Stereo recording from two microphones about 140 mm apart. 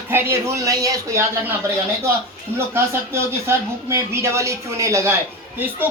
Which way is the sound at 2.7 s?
20° right (ahead or behind).